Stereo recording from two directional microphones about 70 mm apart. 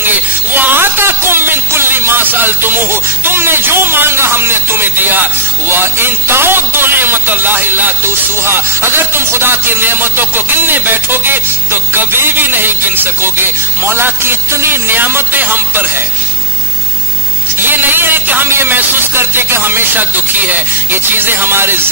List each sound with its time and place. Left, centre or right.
0.0 s music: right
17.6 s music: right